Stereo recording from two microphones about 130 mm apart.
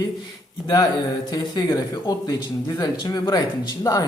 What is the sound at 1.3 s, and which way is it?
Speech, 30° left (ahead or behind).